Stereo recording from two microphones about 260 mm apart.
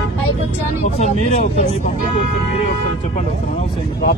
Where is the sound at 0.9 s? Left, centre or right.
Left.